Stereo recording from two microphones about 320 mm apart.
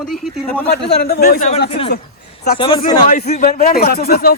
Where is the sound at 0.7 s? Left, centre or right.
Left; by 3.1 s centre.